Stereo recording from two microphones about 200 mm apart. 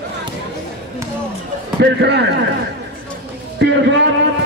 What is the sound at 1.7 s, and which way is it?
Speech, 55° right (ahead or behind).